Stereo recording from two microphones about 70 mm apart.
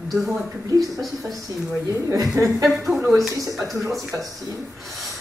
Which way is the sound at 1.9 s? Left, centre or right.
Right.